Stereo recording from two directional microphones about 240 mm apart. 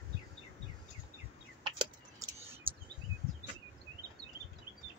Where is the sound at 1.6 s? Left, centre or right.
Centre.